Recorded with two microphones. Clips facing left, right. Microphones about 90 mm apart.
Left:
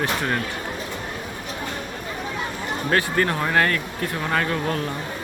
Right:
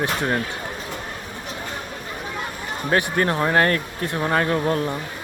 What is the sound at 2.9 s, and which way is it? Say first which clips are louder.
Speech: right 1 dB; 25° right (ahead or behind).